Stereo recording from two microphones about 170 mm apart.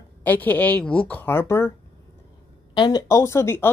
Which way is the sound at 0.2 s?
10° left (ahead or behind).